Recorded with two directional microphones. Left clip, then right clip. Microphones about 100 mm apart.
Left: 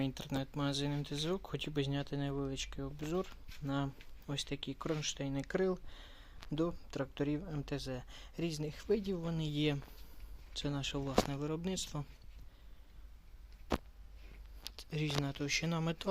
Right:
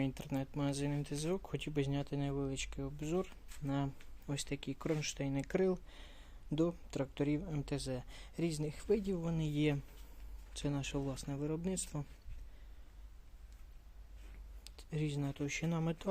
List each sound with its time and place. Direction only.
0.0 s speech: 10° right (ahead or behind); by 5.7 s 30° right (ahead or behind)
5.9 s a sound: 30° right (ahead or behind)
6.6 s speech: 30° right (ahead or behind); by 12.0 s 15° right (ahead or behind)
14.8 s speech: 10° right (ahead or behind)